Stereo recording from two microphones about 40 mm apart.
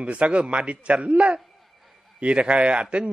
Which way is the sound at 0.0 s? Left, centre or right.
Right.